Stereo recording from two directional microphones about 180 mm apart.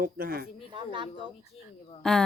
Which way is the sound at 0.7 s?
25° right (ahead or behind).